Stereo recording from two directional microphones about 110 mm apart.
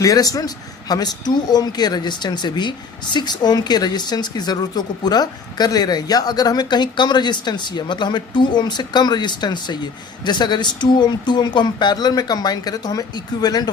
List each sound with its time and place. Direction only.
0.0 s speech: 35° left (ahead or behind)